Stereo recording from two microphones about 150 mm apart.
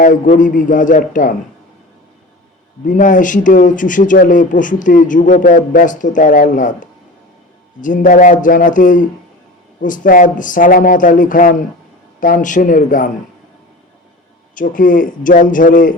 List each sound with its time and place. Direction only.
0.0 s speech: 60° left (ahead or behind)
2.8 s speech: 60° left (ahead or behind)
14.5 s speech: 65° left (ahead or behind)